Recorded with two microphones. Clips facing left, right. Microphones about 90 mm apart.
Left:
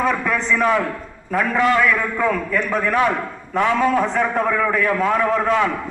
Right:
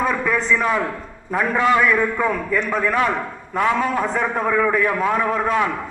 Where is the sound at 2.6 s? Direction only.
Centre (ahead or behind).